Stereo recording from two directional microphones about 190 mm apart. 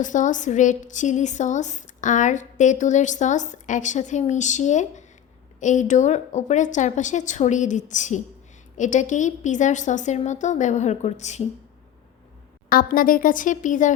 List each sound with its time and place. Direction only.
0.0 s speech: 40° left (ahead or behind)
12.6 s speech: 50° left (ahead or behind)